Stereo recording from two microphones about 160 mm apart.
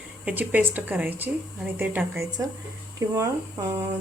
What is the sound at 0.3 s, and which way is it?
A woman's voice, 10° right (ahead or behind).